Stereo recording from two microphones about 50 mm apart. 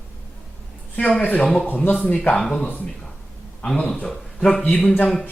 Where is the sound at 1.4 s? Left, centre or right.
Centre.